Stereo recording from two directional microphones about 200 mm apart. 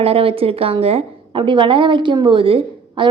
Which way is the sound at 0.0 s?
25° right (ahead or behind).